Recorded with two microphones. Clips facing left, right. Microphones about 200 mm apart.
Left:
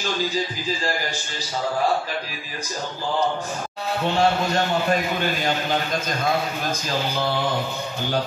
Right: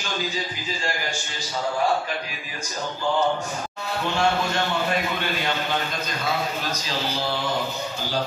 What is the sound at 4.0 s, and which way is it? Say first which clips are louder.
A man's voice: left 2 dB; 35° left (ahead or behind).